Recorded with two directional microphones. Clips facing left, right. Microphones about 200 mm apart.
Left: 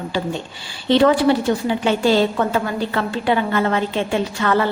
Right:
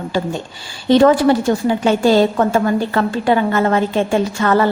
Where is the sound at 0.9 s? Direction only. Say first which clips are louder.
Right 3 dB; 45° right (ahead or behind).